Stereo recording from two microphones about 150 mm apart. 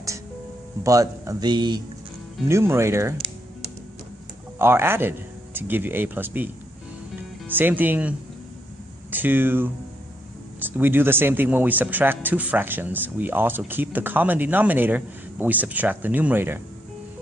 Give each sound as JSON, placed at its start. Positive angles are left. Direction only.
{"t": 0.9, "sound": "a man's voice", "side_deg": -20}
{"t": 2.5, "sound": "speech", "side_deg": -20}
{"t": 4.5, "sound": "speech", "side_deg": -15}